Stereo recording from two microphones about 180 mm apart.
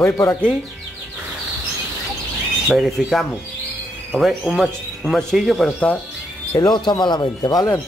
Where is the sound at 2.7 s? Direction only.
Centre (ahead or behind).